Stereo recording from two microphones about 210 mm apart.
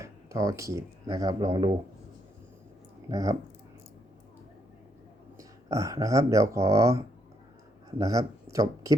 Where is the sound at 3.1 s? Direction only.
15° right (ahead or behind).